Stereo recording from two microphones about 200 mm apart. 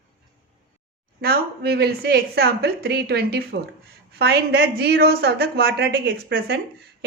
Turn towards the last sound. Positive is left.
turn(degrees=-55)  # may be behind; listen again after turning